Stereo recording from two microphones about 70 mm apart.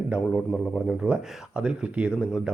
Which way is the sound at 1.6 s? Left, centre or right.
Centre.